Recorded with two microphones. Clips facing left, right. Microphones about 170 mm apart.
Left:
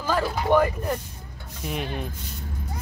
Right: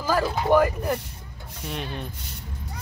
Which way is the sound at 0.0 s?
10° right (ahead or behind).